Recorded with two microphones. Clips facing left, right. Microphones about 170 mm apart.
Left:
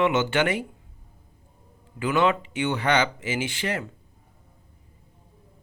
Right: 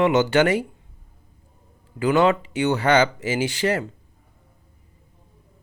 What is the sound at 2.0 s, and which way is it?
Speech, 40° right (ahead or behind).